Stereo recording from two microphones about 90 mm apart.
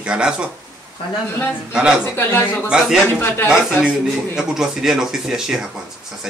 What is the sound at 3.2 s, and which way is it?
Speech, 25° left (ahead or behind).